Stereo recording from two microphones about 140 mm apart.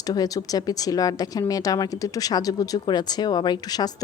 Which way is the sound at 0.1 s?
25° left (ahead or behind).